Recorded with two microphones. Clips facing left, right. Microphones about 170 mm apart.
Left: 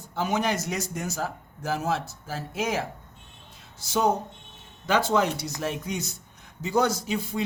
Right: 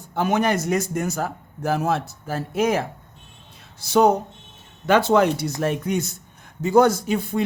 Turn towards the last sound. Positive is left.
turn(degrees=-55)  # may be behind; listen again after turning